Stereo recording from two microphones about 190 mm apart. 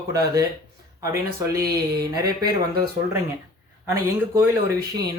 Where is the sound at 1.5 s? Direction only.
55° right (ahead or behind).